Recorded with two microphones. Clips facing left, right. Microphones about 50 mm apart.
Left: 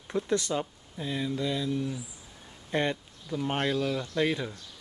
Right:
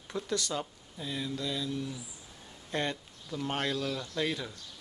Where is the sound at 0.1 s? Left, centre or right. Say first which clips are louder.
Left 5 dB; left.